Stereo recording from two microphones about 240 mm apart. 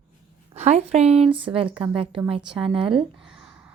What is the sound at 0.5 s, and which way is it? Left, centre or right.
A woman's voice, right.